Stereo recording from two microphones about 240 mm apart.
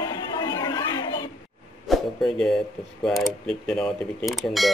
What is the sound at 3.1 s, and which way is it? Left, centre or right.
Speech, centre.